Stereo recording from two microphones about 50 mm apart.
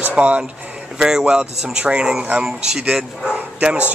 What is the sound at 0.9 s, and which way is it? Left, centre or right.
Speech, centre.